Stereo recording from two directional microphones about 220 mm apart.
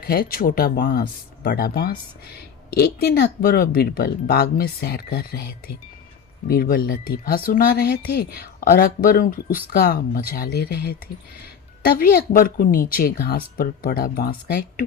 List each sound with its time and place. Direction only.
0.1 s a woman's voice: 40° left (ahead or behind)